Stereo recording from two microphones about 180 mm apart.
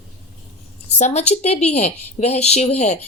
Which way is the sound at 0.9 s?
40° left (ahead or behind).